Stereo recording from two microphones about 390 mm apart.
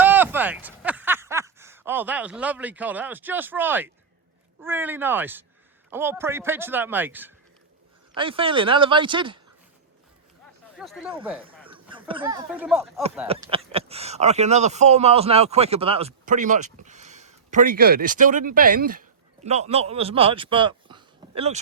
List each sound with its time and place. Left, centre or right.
0.0 s a sound: centre
4.6 s a man's voice: centre
10.8 s a man's voice: centre
13.2 s speech: centre